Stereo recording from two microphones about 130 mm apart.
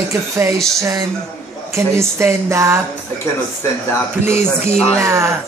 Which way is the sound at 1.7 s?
20° right (ahead or behind).